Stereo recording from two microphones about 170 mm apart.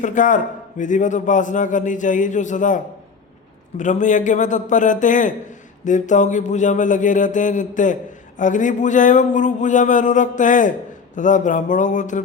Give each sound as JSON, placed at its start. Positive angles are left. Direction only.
{"t": 0.0, "sound": "a man's voice", "side_deg": 50}